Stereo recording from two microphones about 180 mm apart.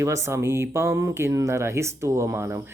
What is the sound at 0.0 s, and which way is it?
Speech, 15° right (ahead or behind).